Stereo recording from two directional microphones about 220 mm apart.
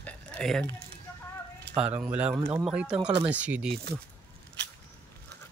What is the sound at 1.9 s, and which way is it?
Speech, 5° right (ahead or behind).